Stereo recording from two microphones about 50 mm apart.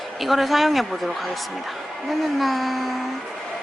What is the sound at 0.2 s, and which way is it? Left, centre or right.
A woman's voice, centre.